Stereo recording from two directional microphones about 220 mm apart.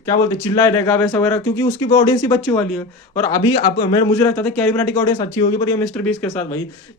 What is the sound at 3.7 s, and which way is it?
Speech, 20° left (ahead or behind).